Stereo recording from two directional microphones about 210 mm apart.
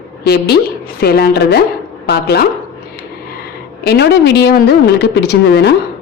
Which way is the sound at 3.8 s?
50° left (ahead or behind).